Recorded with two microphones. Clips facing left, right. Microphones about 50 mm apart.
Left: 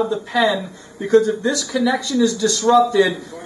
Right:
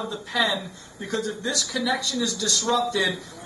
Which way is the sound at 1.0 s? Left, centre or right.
Centre.